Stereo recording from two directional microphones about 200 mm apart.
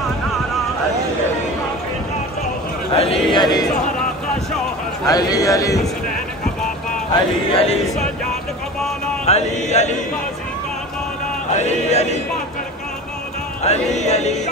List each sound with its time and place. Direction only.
2.9 s speech: 30° left (ahead or behind)
5.0 s a man's voice: 20° left (ahead or behind)
7.5 s chant: 30° left (ahead or behind)
9.2 s chant: 35° left (ahead or behind)
11.5 s chant: 35° left (ahead or behind)
13.7 s chant: 35° left (ahead or behind)